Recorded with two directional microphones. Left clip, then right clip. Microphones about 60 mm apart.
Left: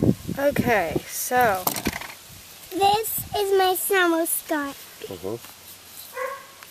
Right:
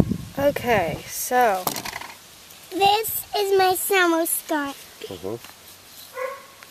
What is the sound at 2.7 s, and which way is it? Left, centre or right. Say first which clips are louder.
Speech: right 1 dB; right.